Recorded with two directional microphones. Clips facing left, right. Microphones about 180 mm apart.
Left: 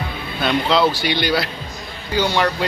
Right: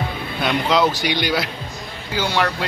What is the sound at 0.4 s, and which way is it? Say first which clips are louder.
Speech: left 1 dB; 15° right (ahead or behind).